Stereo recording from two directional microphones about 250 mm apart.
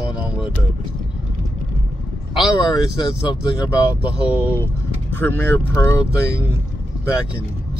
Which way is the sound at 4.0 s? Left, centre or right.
Centre.